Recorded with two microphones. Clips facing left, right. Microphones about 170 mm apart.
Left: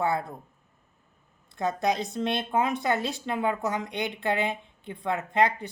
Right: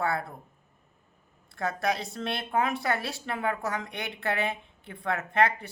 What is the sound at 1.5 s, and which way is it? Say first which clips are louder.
Speech: left 3 dB; 20° left (ahead or behind).